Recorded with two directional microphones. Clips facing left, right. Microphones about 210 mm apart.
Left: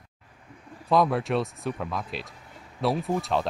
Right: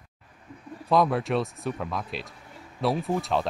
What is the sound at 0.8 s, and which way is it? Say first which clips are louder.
Speech: even; centre (ahead or behind).